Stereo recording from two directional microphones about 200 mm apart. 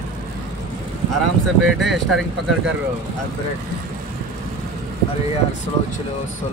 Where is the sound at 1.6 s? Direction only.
Centre (ahead or behind).